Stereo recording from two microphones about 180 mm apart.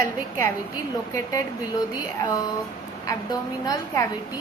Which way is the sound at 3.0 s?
20° left (ahead or behind).